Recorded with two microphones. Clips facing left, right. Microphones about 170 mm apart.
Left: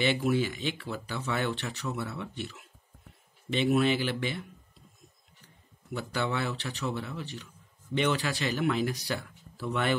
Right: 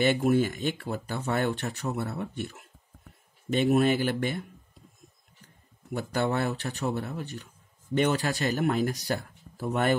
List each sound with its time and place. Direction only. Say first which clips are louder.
0.0 s speech: right 4 dB; 45° right (ahead or behind)
5.9 s speech: right 4 dB; 45° right (ahead or behind)